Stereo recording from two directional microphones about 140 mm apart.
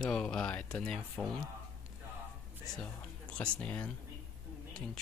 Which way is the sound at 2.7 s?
10° left (ahead or behind).